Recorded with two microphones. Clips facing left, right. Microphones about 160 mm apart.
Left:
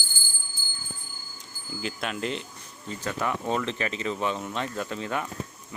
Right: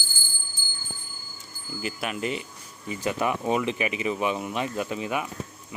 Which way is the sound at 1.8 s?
5° right (ahead or behind).